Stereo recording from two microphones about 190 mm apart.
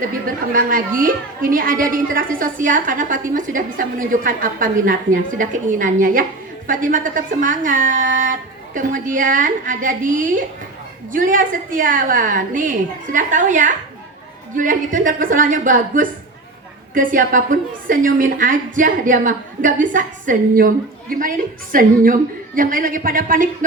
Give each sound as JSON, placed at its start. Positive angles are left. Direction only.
{"t": 0.5, "sound": "a woman's voice", "side_deg": -45}